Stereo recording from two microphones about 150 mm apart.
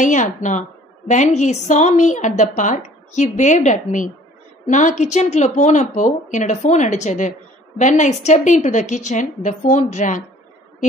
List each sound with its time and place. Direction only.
0.0 s a woman's voice: 55° left (ahead or behind)